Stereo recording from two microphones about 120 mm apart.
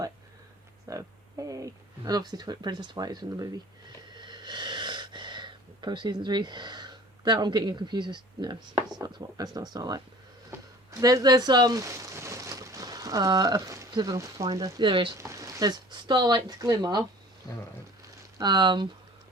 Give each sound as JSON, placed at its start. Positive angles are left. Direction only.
{"t": 0.9, "sound": "speech", "side_deg": -25}
{"t": 10.9, "sound": "a sound", "side_deg": -30}
{"t": 14.5, "sound": "speech", "side_deg": -35}
{"t": 15.2, "sound": "speech", "side_deg": -25}
{"t": 18.3, "sound": "speech", "side_deg": -40}